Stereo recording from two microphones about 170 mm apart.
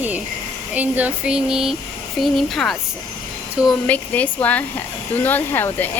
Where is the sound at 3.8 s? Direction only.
10° left (ahead or behind).